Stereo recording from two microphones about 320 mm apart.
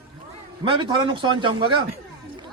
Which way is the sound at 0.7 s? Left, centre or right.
Centre.